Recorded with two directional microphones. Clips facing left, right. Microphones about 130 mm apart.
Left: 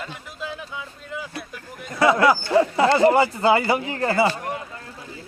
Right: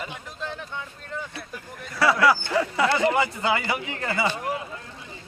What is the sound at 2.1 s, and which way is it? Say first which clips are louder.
Speech: left 4 dB; 25° left (ahead or behind).